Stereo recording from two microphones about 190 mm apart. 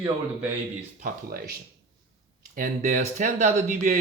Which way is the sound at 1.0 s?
50° right (ahead or behind).